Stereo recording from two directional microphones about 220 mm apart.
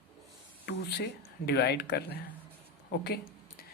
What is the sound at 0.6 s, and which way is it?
Speech, 50° left (ahead or behind).